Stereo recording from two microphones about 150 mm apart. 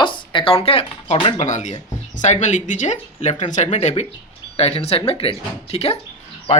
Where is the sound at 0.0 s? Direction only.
30° left (ahead or behind).